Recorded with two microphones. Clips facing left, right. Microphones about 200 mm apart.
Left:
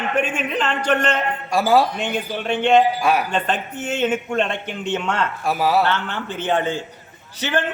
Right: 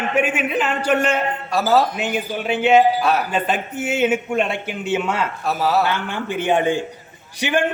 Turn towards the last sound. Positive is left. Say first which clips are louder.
# right 2 dB
turn(degrees=-15)  # may be behind; listen again after turning